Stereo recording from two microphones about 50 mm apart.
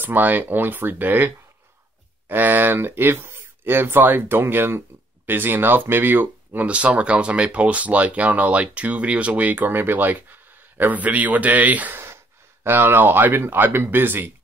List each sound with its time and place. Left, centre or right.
0.0 s speech: right
6.6 s speech: right
9.6 s speech: right
12.6 s speech: right